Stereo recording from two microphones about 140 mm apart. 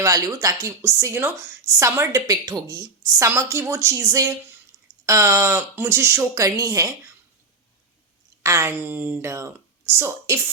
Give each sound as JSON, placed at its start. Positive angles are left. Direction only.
{"t": 0.0, "sound": "a woman's voice", "side_deg": -20}
{"t": 8.4, "sound": "speech", "side_deg": -20}